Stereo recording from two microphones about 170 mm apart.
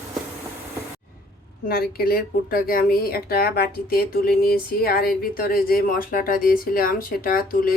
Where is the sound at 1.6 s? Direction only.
60° left (ahead or behind).